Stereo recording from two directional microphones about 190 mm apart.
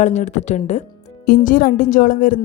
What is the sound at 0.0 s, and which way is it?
A woman's voice, 40° left (ahead or behind).